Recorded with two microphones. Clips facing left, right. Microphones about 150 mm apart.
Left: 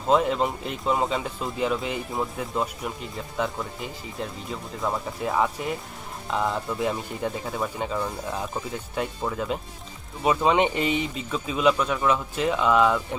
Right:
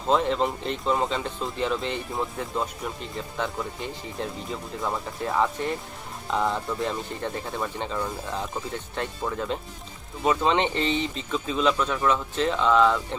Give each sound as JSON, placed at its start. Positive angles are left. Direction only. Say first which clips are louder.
{"t": 0.1, "sound": "speech", "louder": "left 1 dB", "side_deg": 5}